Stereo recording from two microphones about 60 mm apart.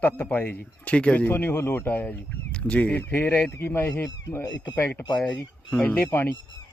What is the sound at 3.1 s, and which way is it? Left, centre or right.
A man's voice, left.